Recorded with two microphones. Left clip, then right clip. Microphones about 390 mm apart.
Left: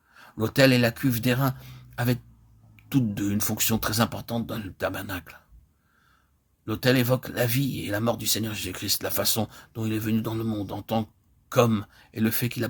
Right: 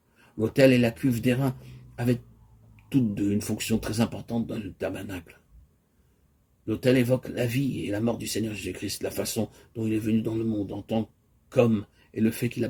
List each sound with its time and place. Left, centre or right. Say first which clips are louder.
0.2 s speech: even; left
2.9 s speech: right 1 dB; left
6.7 s speech: even; left
10.5 s speech: right 1 dB; left
11.7 s speech: even; left